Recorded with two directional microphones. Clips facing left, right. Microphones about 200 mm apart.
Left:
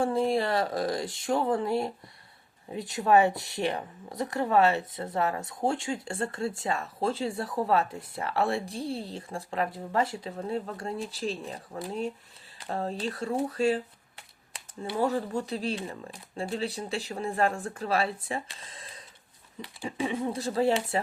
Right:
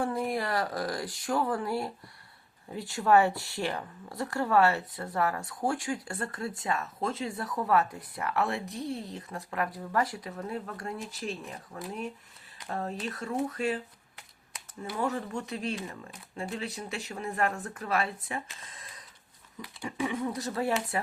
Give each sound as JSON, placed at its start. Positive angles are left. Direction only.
{"t": 0.0, "sound": "speech", "side_deg": 30}